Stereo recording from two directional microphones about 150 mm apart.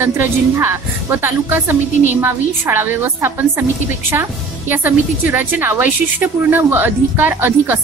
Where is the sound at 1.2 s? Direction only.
15° right (ahead or behind).